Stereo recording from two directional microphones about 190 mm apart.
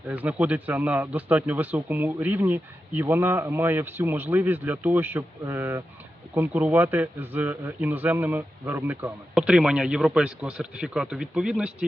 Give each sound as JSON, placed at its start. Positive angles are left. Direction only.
{"t": 0.1, "sound": "speech", "side_deg": -10}